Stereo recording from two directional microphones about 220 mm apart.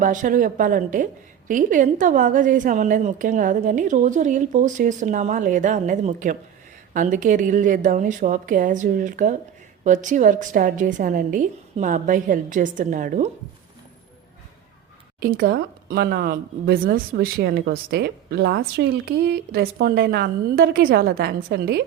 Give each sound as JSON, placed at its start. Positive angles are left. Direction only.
{"t": 0.0, "sound": "a woman's voice", "side_deg": -35}
{"t": 15.2, "sound": "speech", "side_deg": -45}